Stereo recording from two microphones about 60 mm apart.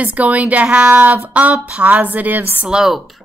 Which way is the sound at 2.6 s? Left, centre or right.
Centre.